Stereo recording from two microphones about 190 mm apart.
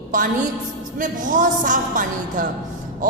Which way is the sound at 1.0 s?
45° right (ahead or behind).